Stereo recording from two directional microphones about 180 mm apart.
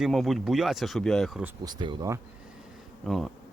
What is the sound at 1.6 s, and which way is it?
Speech, 25° right (ahead or behind).